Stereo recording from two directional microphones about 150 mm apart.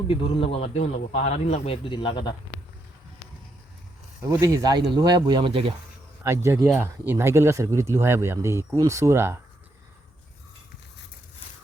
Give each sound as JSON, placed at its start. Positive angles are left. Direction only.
{"t": 0.1, "sound": "a man's voice", "side_deg": 40}
{"t": 4.3, "sound": "speech", "side_deg": -25}
{"t": 6.2, "sound": "speech", "side_deg": -20}